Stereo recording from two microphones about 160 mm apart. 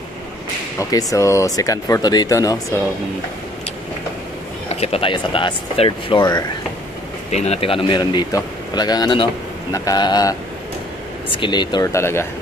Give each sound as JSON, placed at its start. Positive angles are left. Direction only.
{"t": 0.7, "sound": "speech", "side_deg": 20}
{"t": 4.6, "sound": "a man's voice", "side_deg": 40}
{"t": 7.2, "sound": "a man's voice", "side_deg": 45}